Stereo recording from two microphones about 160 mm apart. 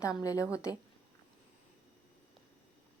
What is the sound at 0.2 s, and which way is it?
Speech, 20° left (ahead or behind).